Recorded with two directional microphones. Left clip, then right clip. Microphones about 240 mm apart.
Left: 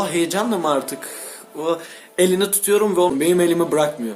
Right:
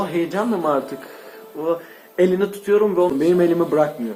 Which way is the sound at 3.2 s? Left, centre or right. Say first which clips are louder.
Even; centre.